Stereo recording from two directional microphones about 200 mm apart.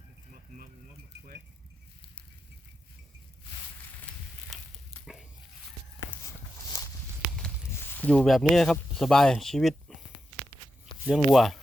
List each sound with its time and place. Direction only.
6.7 s walk: 15° left (ahead or behind)
7.3 s speech: 5° left (ahead or behind)
11.0 s speech: centre (ahead or behind)